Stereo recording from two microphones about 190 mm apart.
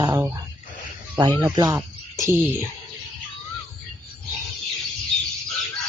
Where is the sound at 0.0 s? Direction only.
20° right (ahead or behind).